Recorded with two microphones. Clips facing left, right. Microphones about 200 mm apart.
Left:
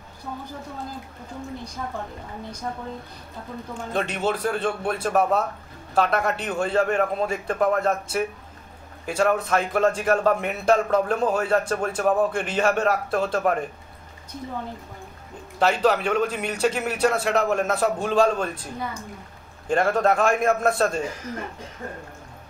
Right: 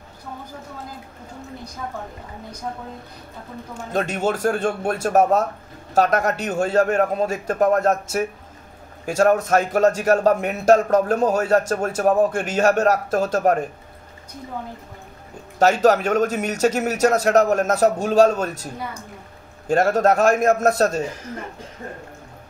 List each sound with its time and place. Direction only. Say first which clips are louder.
3.9 s a man's voice: right 3 dB; 45° right (ahead or behind)
15.6 s a man's voice: right 4 dB; 45° right (ahead or behind)
19.7 s a man's voice: right 3 dB; 40° right (ahead or behind)